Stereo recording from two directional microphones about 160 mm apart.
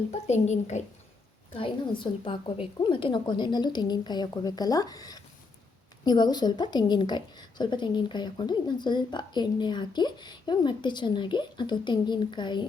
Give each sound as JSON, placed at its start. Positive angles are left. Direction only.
{"t": 0.1, "sound": "a woman's voice", "side_deg": 45}
{"t": 1.5, "sound": "speech", "side_deg": 30}